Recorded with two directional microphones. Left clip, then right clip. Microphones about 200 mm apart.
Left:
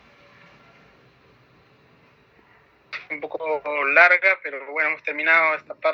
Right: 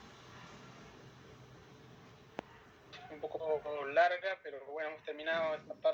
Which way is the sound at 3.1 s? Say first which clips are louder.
Left 10 dB; 45° left (ahead or behind).